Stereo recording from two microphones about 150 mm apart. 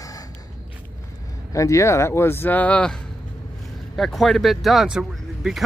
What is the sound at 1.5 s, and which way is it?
Speech, 20° left (ahead or behind).